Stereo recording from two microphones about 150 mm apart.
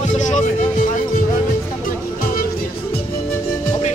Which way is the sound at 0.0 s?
55° left (ahead or behind).